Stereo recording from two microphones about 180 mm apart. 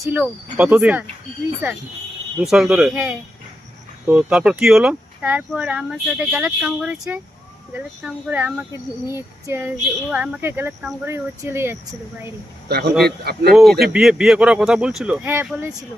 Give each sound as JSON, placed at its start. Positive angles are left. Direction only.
{"t": 0.1, "sound": "speech", "side_deg": -5}
{"t": 2.4, "sound": "speech", "side_deg": -5}
{"t": 12.6, "sound": "speech", "side_deg": -60}
{"t": 13.8, "sound": "speech", "side_deg": -5}